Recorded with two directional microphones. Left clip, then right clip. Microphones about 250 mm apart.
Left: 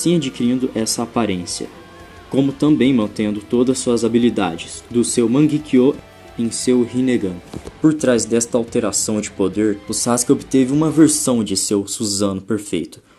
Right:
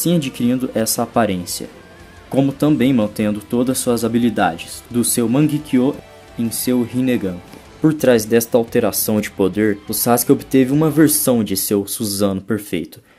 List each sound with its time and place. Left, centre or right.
0.0 s speech: right